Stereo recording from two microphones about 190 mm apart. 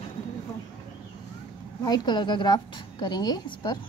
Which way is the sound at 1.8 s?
20° left (ahead or behind).